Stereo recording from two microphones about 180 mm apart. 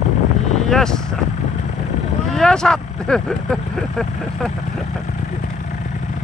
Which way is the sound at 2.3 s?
5° left (ahead or behind).